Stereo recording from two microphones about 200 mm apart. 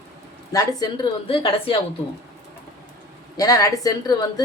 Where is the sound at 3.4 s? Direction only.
20° left (ahead or behind).